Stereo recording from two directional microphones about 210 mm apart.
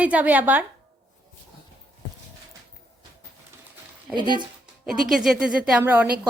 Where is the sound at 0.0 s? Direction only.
5° right (ahead or behind).